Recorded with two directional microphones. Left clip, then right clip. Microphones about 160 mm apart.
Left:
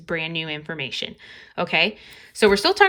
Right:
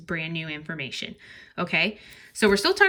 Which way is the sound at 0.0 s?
15° left (ahead or behind).